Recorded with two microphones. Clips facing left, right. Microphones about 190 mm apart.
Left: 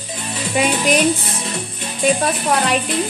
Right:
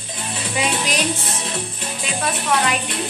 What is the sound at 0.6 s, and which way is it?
Music, 55° left (ahead or behind).